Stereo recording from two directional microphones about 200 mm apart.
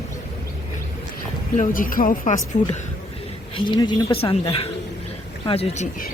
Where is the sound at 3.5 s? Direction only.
25° left (ahead or behind).